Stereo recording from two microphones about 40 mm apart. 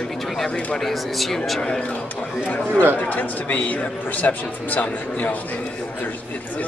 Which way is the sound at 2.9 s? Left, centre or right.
Left.